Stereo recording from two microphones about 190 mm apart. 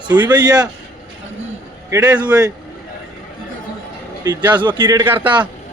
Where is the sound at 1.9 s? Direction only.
20° right (ahead or behind).